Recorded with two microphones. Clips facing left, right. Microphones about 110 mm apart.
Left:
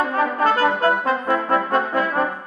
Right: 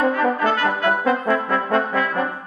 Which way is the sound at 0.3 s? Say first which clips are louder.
Left 2 dB; 35° left (ahead or behind).